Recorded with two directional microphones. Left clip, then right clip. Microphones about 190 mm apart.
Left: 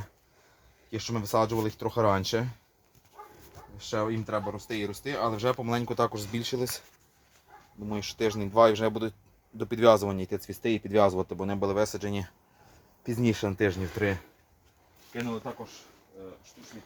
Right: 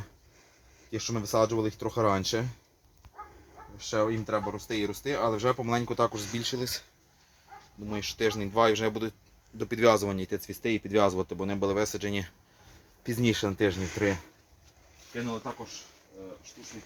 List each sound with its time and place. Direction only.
0.9 s speech: 50° left (ahead or behind)
3.8 s speech: 40° left (ahead or behind)
7.9 s speech: 45° left (ahead or behind)
15.1 s speech: 35° left (ahead or behind)